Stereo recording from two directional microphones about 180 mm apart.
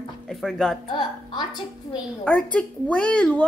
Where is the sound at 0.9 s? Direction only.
25° left (ahead or behind).